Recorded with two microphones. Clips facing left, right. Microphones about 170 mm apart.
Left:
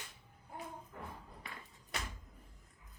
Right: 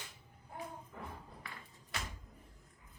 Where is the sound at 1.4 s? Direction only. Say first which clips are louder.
Left 1 dB; 20° left (ahead or behind).